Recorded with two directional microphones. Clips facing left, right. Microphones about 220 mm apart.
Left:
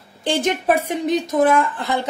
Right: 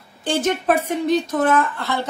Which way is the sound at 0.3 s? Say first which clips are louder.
Even; 15° left (ahead or behind).